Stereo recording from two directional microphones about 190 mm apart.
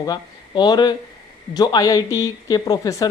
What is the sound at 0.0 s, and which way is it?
Speech, 20° left (ahead or behind).